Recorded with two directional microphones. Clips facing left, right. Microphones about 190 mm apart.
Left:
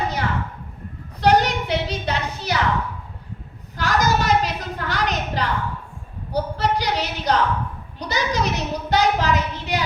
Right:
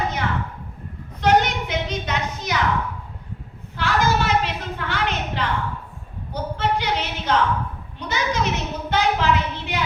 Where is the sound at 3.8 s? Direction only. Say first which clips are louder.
Even; 40° left (ahead or behind).